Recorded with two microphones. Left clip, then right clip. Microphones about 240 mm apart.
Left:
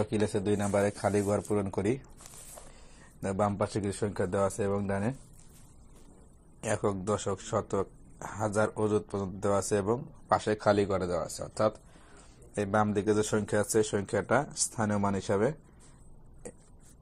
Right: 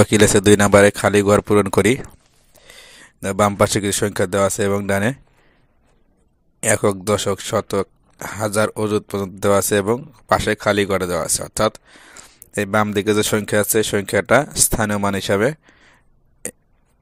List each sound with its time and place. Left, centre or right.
0.0 s speech: right
6.6 s speech: right
9.9 s speech: right
10.9 s speech: right
14.9 s speech: right